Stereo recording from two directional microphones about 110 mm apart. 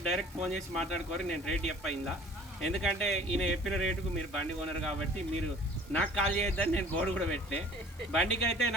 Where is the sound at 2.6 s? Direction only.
5° left (ahead or behind).